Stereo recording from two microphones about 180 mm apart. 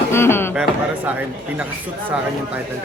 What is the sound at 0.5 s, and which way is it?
Speech, 5° right (ahead or behind).